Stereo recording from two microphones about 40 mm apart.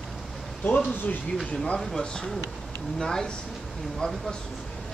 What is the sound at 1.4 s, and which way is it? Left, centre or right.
Speech, centre.